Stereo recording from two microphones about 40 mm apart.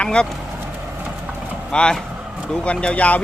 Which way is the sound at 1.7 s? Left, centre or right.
Left.